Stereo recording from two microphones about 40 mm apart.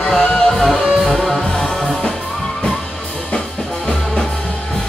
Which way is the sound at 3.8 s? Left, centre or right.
Centre.